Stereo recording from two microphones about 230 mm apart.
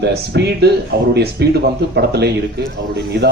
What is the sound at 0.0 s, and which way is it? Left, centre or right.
A man's voice, right.